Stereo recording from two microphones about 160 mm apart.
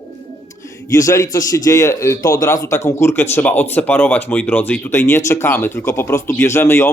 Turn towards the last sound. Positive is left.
turn(degrees=15)  # may be behind; listen again after turning